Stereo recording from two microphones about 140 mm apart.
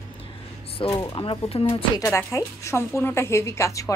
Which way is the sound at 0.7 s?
40° left (ahead or behind).